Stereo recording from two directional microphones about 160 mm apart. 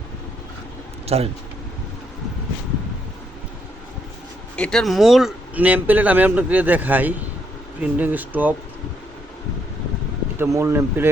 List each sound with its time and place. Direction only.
1.0 s speech: 40° right (ahead or behind)
4.5 s speech: 5° left (ahead or behind); by 8.5 s 10° right (ahead or behind)
10.3 s speech: 15° right (ahead or behind)